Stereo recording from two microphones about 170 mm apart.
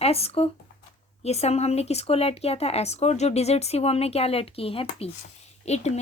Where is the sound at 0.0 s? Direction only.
35° left (ahead or behind).